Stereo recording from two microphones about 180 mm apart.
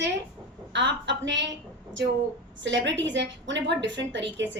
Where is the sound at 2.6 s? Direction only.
80° right.